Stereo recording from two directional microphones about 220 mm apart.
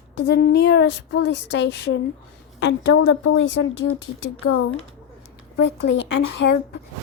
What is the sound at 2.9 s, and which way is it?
Speech, 65° left (ahead or behind).